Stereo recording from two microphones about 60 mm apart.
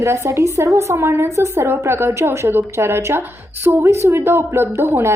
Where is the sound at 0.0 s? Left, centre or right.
Right.